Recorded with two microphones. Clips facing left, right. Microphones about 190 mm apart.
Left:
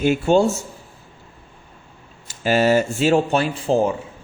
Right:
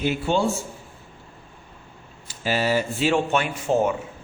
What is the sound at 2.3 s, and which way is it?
Speech, 50° left (ahead or behind).